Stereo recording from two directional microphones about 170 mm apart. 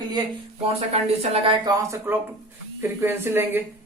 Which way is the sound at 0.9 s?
35° right (ahead or behind).